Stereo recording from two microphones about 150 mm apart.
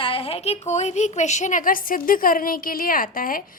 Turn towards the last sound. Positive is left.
turn(degrees=70)  # may be behind; listen again after turning